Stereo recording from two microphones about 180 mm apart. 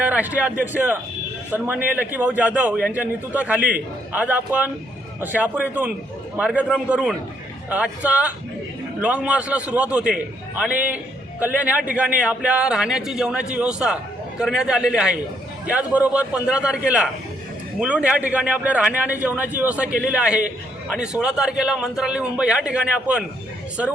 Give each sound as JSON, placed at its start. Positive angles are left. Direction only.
{"t": 0.0, "sound": "a man's voice", "side_deg": -10}